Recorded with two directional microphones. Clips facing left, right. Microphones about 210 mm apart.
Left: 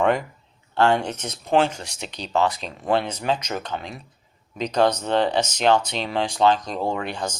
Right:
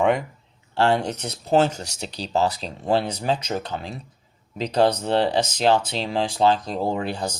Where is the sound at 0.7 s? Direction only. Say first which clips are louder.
Left 1 dB; 30° right (ahead or behind).